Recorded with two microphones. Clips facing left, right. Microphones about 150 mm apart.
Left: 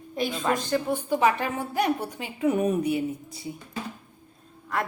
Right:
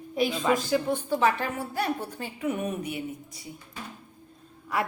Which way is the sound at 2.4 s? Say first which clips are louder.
Left 7 dB; 35° left (ahead or behind).